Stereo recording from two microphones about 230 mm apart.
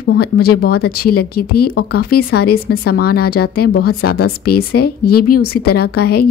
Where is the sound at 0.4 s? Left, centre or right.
Left.